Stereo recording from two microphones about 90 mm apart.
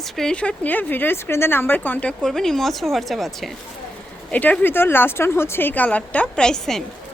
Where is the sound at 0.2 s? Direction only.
10° left (ahead or behind).